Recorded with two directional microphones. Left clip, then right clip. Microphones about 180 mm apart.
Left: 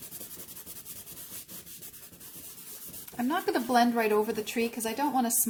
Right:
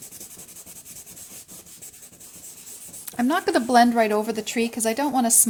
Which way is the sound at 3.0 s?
50° right (ahead or behind).